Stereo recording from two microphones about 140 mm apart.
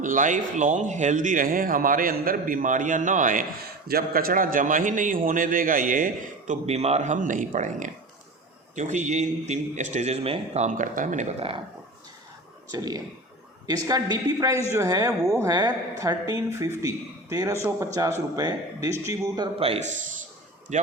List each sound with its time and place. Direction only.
0.0 s speech: 65° right (ahead or behind)
3.8 s speech: 90° right; by 6.1 s 75° right (ahead or behind)
6.5 s a man's voice: 50° right (ahead or behind); by 11.3 s 65° right (ahead or behind)
11.3 s speech: 40° right (ahead or behind)
12.7 s a man's voice: 25° right (ahead or behind)
19.5 s speech: 45° right (ahead or behind)
20.7 s a man's voice: 55° right (ahead or behind)